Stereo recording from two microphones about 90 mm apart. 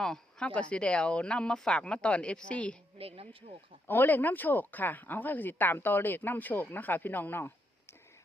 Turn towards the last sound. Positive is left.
turn(degrees=25)  # may be behind; listen again after turning